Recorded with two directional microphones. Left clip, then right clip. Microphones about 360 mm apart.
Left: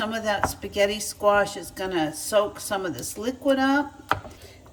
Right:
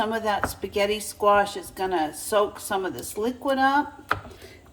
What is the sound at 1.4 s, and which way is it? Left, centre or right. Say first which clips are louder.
Speech: right 1 dB; centre.